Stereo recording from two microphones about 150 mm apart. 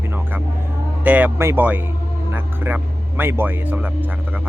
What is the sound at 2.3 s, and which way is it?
Vehicle, 15° right (ahead or behind).